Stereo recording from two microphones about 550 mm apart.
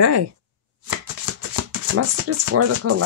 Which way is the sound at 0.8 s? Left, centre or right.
Right.